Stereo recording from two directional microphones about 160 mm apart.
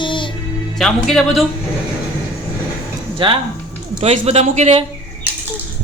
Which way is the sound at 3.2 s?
35° right (ahead or behind).